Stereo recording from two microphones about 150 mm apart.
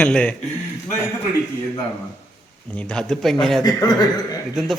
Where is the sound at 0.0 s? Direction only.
10° left (ahead or behind).